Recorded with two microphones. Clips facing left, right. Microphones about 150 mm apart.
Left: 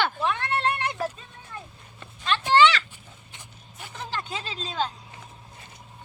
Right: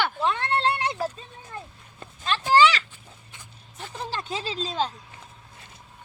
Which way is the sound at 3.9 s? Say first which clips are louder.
Right 2 dB; 30° right (ahead or behind).